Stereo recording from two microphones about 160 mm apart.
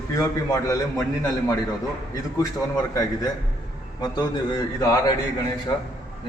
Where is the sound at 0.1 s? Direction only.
25° left (ahead or behind).